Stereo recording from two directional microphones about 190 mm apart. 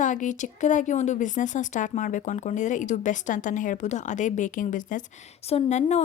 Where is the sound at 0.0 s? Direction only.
40° left (ahead or behind).